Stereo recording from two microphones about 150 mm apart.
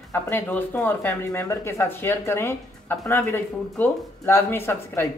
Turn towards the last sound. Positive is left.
turn(degrees=15)  # may be behind; listen again after turning